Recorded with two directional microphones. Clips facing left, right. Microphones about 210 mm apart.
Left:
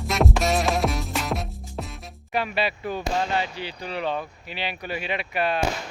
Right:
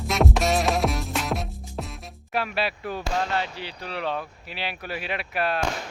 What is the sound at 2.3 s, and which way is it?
Speech, centre (ahead or behind).